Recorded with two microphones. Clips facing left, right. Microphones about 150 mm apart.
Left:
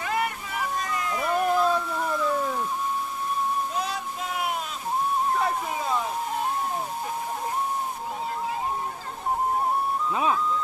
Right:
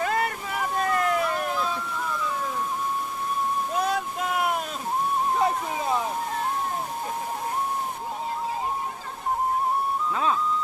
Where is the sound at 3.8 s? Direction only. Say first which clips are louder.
Right 5 dB; 50° right (ahead or behind).